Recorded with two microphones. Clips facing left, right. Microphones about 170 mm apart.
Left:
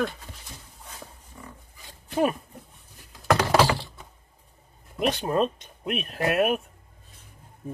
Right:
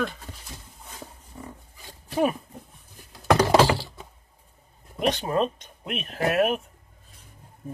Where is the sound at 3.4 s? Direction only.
15° right (ahead or behind).